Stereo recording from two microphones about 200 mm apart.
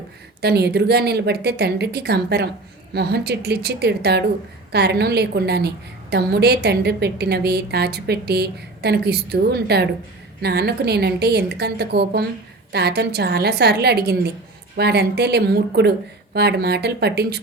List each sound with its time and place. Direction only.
0.4 s a woman's voice: 55° right (ahead or behind)